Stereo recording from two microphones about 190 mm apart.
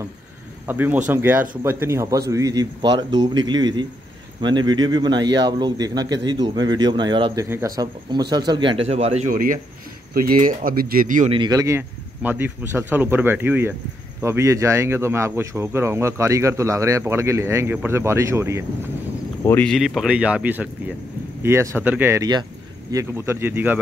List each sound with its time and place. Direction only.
0.7 s a man's voice: 10° right (ahead or behind); by 11.2 s 45° right (ahead or behind)
11.2 s speech: 25° right (ahead or behind)
19.4 s speech: 10° left (ahead or behind); by 23.8 s 10° right (ahead or behind)